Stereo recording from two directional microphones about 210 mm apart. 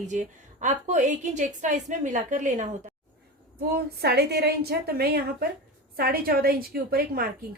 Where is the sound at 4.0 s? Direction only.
50° right (ahead or behind).